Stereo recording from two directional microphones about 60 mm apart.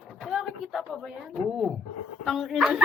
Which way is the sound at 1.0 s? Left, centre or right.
Centre.